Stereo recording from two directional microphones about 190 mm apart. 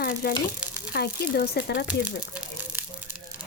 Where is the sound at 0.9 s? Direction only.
60° left (ahead or behind).